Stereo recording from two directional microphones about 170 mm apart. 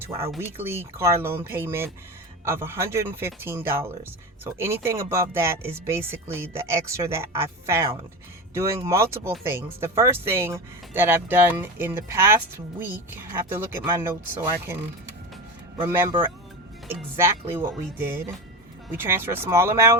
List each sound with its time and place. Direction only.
0.5 s speech: 15° right (ahead or behind)
15.8 s speech: 15° right (ahead or behind)